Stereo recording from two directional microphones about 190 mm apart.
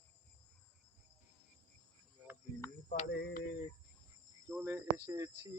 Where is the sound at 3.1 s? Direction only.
60° left (ahead or behind).